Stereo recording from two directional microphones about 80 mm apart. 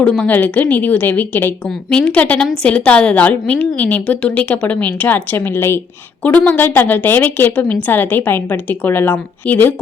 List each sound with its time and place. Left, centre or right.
0.0 s a woman's voice: centre
1.9 s a woman's voice: centre; by 5.8 s left
6.2 s a woman's voice: centre